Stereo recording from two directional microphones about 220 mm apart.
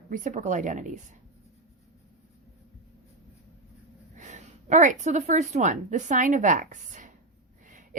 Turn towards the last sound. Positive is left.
turn(degrees=-35)  # may be behind; listen again after turning